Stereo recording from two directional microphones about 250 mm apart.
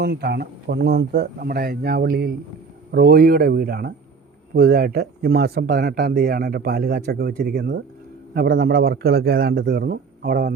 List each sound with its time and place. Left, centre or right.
0.0 s speech: right